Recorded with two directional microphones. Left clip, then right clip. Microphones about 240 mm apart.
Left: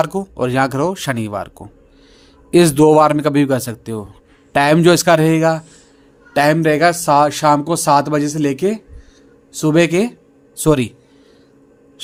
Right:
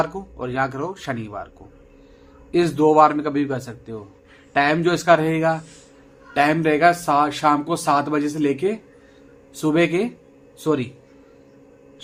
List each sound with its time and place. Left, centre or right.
0.0 s speech: left